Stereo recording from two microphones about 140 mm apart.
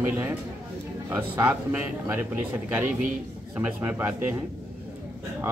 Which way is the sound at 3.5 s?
10° right (ahead or behind).